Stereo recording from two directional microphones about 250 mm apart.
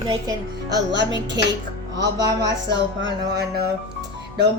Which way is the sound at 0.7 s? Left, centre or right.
Right.